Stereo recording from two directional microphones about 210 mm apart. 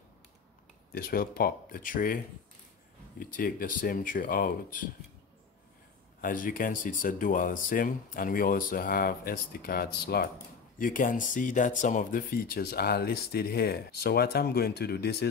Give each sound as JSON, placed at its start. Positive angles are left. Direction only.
{"t": 0.9, "sound": "speech", "side_deg": 45}
{"t": 3.2, "sound": "speech", "side_deg": 45}
{"t": 6.2, "sound": "speech", "side_deg": 40}